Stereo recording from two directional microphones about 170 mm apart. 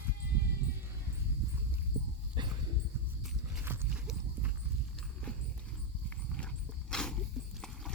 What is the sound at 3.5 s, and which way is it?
Horse, 10° right (ahead or behind).